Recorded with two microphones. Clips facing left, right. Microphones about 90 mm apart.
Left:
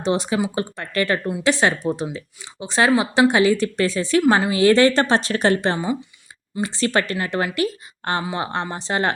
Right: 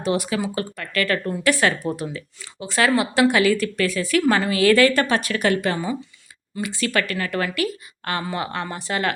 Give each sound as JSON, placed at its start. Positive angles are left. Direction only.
{"t": 0.0, "sound": "speech", "side_deg": 25}
{"t": 6.6, "sound": "speech", "side_deg": 30}